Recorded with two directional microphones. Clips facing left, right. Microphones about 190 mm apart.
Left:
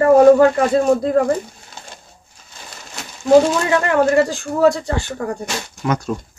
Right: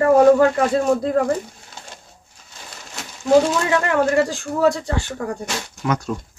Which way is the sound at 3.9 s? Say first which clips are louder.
Left 4 dB; 40° left (ahead or behind).